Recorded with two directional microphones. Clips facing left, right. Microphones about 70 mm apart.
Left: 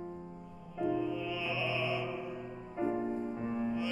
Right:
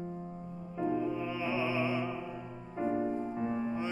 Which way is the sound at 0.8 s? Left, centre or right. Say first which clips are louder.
Right 1 dB; right.